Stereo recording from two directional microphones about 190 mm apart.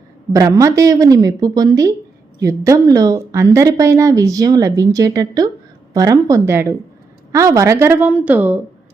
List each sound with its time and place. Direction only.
0.3 s a woman's voice: 15° right (ahead or behind)